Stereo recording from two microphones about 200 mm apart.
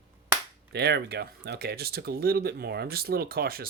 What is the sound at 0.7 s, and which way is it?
Speech, 55° right (ahead or behind).